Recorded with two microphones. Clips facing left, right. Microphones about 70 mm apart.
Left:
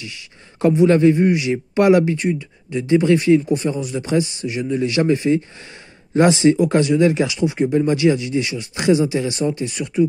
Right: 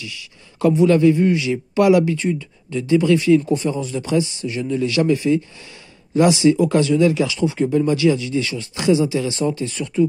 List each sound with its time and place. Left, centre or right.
0.0 s a man's voice: left
6.6 s a man's voice: left
9.6 s speech: centre